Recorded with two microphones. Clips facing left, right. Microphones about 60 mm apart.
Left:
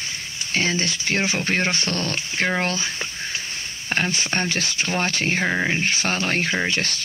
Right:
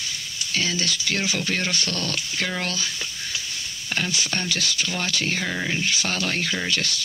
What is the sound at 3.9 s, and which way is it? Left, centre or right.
Speech, left.